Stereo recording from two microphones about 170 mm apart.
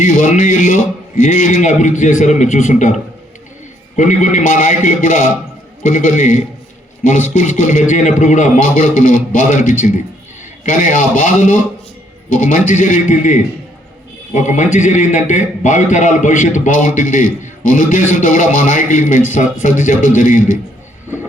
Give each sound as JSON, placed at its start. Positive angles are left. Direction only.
{"t": 0.0, "sound": "a man's voice", "side_deg": 50}